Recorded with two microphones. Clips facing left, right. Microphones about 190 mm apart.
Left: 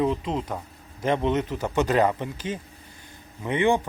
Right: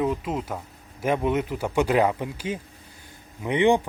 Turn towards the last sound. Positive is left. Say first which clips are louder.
# right 2 dB
turn(degrees=-15)  # may be behind; listen again after turning